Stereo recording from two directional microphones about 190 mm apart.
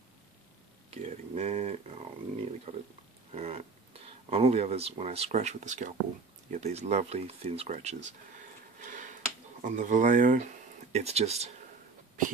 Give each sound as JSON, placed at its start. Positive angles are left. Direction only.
{"t": 0.8, "sound": "speech", "side_deg": -35}
{"t": 8.8, "sound": "a sound", "side_deg": -40}
{"t": 9.6, "sound": "speech", "side_deg": -40}